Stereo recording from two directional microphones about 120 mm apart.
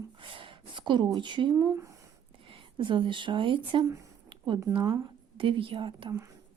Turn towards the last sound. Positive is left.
turn(degrees=-45)  # may be behind; listen again after turning